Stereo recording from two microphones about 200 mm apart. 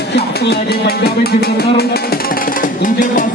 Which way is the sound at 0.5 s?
55° left (ahead or behind).